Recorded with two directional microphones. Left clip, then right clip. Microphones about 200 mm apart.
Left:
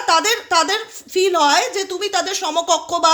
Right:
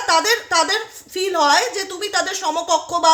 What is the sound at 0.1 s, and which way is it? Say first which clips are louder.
A woman's voice: left 1 dB; 35° left (ahead or behind).